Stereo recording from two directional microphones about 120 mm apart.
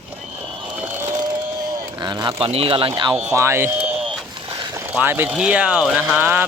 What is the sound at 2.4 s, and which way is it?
Speech, 50° right (ahead or behind).